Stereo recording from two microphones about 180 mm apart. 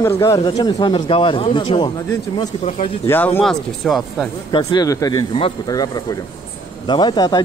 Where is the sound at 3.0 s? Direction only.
10° left (ahead or behind).